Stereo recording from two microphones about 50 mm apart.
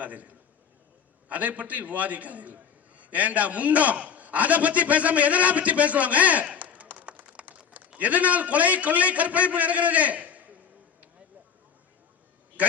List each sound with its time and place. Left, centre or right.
0.0 s a man's voice: right
12.6 s speech: right